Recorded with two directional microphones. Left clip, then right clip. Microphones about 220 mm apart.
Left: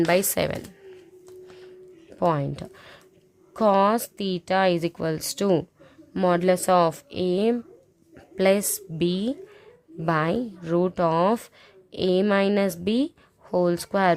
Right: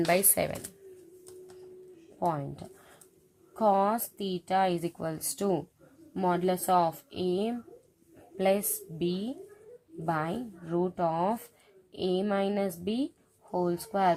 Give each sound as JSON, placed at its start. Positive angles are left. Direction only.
{"t": 0.0, "sound": "speech", "side_deg": 25}
{"t": 2.1, "sound": "a woman's voice", "side_deg": 45}